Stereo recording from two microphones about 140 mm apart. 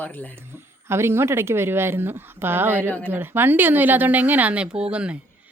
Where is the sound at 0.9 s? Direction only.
20° right (ahead or behind).